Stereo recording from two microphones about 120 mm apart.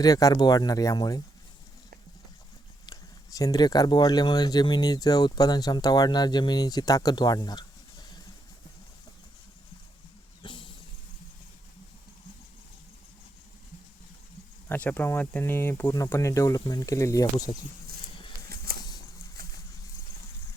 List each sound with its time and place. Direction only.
0.0 s speech: 30° left (ahead or behind)
2.8 s speech: 30° left (ahead or behind)
10.4 s vehicle: 45° left (ahead or behind)
14.7 s speech: 15° left (ahead or behind)